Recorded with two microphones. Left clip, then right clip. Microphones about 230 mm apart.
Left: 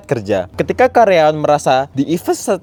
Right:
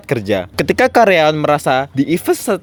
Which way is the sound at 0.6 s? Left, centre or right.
Right.